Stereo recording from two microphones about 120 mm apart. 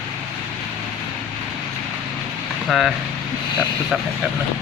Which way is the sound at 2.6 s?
Centre (ahead or behind).